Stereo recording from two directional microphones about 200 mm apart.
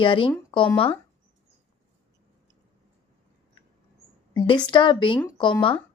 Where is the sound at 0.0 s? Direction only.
25° left (ahead or behind).